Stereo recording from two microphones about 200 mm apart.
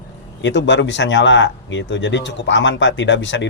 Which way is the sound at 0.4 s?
65° left (ahead or behind).